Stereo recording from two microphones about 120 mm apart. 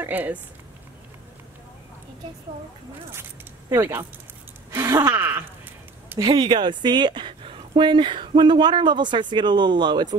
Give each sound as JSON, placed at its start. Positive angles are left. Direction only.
{"t": 0.0, "sound": "speech", "side_deg": -15}
{"t": 3.7, "sound": "speech", "side_deg": -20}
{"t": 6.1, "sound": "speech", "side_deg": -40}